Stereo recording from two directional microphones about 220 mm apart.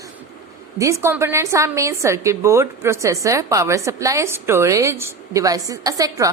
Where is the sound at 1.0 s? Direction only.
10° right (ahead or behind).